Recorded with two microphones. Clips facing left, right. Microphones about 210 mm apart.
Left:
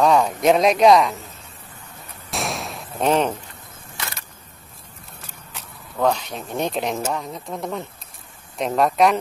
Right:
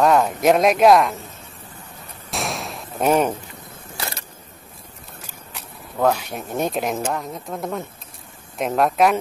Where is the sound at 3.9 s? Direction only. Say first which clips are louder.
Right 3 dB; 35° right (ahead or behind).